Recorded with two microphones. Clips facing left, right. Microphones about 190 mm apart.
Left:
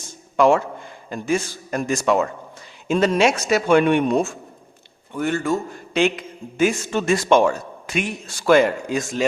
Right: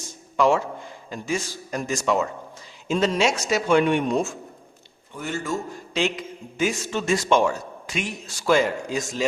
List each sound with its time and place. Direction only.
0.3 s a man's voice: 55° left (ahead or behind)